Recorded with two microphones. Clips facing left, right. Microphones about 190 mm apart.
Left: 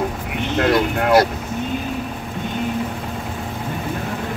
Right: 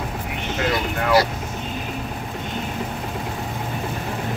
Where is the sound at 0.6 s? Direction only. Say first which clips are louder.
Left 6 dB; 55° left (ahead or behind).